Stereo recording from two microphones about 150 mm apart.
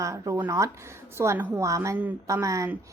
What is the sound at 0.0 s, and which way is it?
A woman's voice, 20° right (ahead or behind).